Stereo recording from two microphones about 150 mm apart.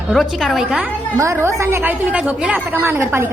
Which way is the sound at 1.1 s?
20° right (ahead or behind).